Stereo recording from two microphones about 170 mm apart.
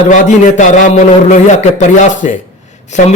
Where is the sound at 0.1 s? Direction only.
45° left (ahead or behind).